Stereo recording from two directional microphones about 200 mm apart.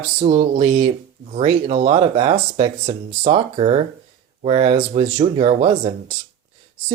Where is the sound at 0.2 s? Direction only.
35° right (ahead or behind).